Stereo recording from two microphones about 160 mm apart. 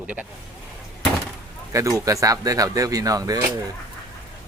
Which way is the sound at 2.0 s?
20° right (ahead or behind).